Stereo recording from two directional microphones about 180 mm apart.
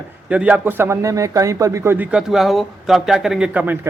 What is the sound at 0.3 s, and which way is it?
A man's voice, 5° right (ahead or behind).